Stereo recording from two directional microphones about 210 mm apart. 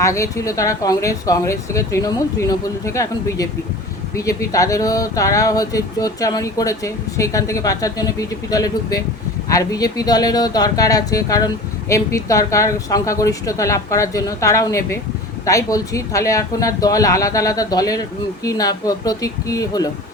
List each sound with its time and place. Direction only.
0.0 s speech: 15° left (ahead or behind)